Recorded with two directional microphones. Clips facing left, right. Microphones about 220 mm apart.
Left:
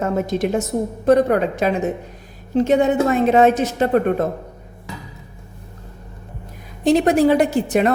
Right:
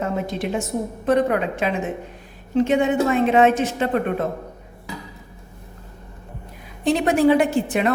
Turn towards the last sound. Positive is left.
turn(degrees=40)  # may be behind; listen again after turning